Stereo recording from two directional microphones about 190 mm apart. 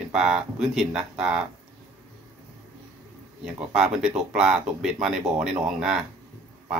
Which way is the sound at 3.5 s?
5° right (ahead or behind).